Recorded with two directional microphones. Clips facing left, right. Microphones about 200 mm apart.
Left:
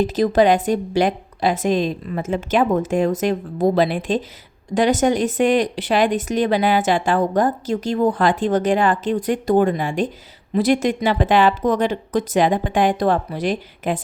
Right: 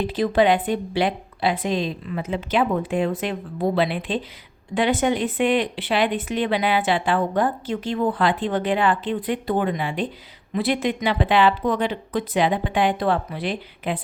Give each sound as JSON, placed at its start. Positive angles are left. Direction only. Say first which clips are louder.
{"t": 0.0, "sound": "speech", "louder": "left 3 dB", "side_deg": 40}